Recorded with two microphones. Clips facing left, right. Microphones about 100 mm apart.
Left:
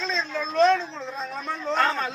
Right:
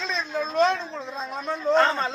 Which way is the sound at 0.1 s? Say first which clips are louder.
Right 3 dB; 15° right (ahead or behind).